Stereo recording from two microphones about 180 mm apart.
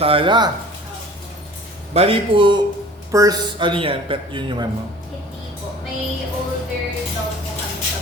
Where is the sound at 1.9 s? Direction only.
35° right (ahead or behind).